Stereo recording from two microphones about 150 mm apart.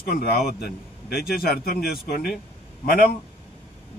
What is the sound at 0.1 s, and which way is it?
A man's voice, 90° left.